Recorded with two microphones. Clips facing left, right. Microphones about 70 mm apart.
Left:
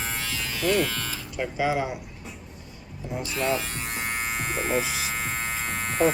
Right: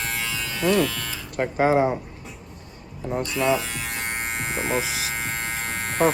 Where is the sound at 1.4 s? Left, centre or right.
Right.